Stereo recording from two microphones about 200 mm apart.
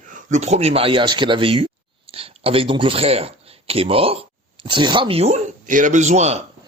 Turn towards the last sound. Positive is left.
turn(degrees=-35)  # may be behind; listen again after turning